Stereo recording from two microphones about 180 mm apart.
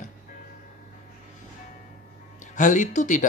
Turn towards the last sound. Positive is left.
turn(degrees=45)  # may be behind; listen again after turning